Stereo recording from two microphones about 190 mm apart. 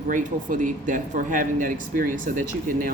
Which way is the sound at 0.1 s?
45° right (ahead or behind).